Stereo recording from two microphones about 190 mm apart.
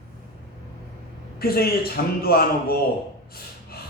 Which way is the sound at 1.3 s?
55° left (ahead or behind).